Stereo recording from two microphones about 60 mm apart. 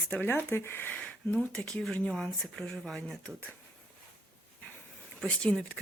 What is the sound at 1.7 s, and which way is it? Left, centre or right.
Speech, centre.